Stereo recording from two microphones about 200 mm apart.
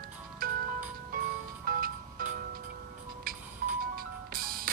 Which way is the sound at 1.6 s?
50° right (ahead or behind).